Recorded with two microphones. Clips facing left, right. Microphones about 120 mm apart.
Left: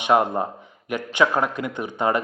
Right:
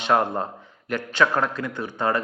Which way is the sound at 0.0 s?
15° left (ahead or behind).